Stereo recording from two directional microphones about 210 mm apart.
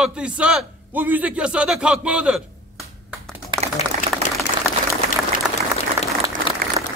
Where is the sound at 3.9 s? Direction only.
35° right (ahead or behind).